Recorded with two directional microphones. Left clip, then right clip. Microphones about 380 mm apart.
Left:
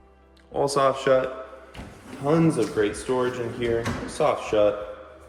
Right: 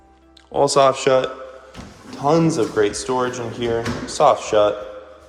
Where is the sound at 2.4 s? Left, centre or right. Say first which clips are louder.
Right 5 dB; centre.